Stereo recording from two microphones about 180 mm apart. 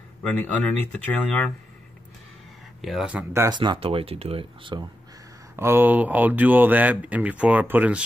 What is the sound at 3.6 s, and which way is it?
Speech, 30° right (ahead or behind).